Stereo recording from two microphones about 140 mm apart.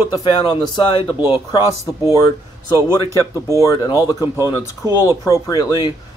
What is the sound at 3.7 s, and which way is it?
Speech, 25° left (ahead or behind).